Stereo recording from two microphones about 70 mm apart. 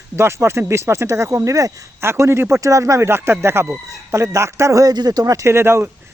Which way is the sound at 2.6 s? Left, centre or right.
Right.